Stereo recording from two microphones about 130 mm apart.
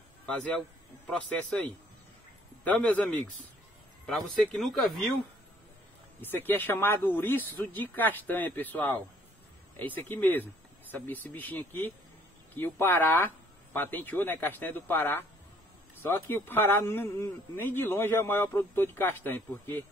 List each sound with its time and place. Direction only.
0.5 s a man's voice: 5° left (ahead or behind)
6.2 s speech: 15° left (ahead or behind)